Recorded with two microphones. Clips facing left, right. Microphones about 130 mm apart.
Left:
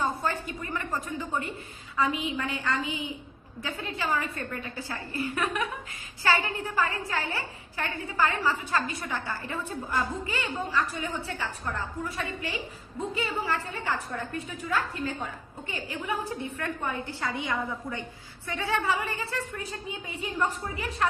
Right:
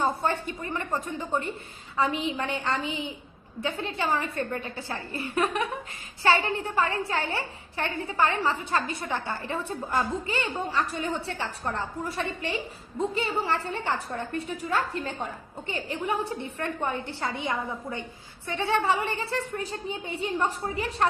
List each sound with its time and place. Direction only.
0.0 s a woman's voice: 25° right (ahead or behind)